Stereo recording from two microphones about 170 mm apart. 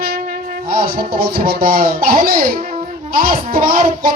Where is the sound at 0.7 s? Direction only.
60° right (ahead or behind).